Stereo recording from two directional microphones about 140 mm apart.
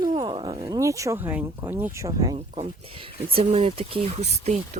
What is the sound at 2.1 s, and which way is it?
Speech, 30° right (ahead or behind).